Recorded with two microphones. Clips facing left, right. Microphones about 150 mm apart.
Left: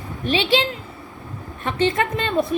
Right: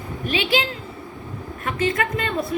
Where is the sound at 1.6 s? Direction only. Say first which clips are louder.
Left 2 dB; 30° left (ahead or behind).